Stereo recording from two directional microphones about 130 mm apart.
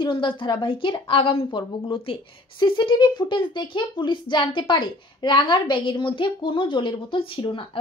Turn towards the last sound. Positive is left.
turn(degrees=40)  # may be behind; listen again after turning